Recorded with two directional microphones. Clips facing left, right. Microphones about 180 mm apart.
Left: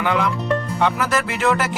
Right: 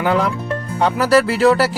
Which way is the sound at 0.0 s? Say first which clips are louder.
Right 3 dB; 35° right (ahead or behind).